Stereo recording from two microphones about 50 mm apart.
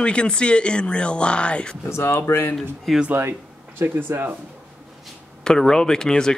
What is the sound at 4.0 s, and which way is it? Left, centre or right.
Speech, right.